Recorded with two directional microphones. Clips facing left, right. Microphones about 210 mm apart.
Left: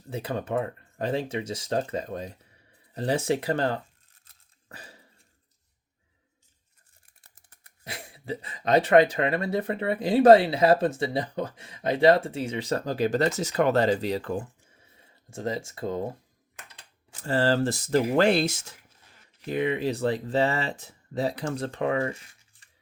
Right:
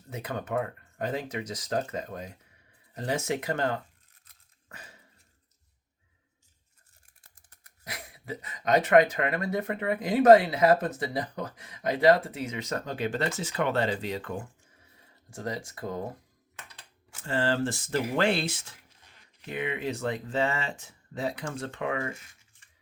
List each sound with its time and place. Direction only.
0.1 s speech: 30° left (ahead or behind)
2.9 s tearing: 30° left (ahead or behind)
7.9 s speech: 30° left (ahead or behind)
17.2 s speech: 40° left (ahead or behind)